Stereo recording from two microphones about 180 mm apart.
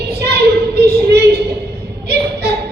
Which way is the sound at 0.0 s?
65° right (ahead or behind).